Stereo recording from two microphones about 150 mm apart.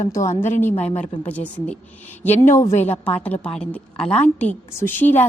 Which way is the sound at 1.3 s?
10° left (ahead or behind).